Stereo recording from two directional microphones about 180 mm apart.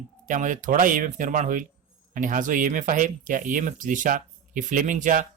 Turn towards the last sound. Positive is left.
turn(degrees=-45)  # may be behind; listen again after turning